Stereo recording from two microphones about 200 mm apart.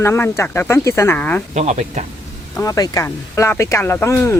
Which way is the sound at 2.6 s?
15° left (ahead or behind).